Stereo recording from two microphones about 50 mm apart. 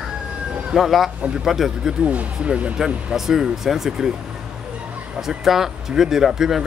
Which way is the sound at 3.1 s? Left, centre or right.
Centre.